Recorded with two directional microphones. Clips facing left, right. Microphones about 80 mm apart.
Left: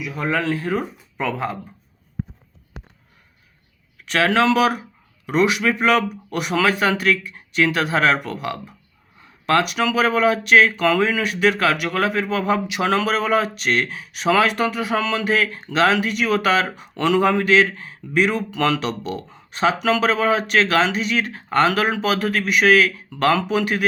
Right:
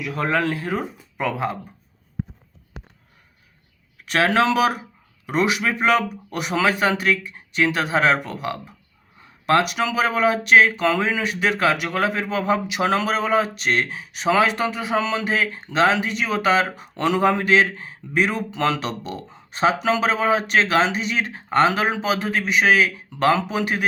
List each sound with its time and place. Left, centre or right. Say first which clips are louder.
0.0 s speech: right 2 dB; right
1.3 s speech: even; right
4.1 s speech: left 1 dB; right